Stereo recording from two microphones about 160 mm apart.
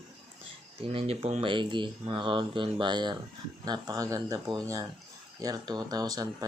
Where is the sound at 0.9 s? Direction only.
40° right (ahead or behind).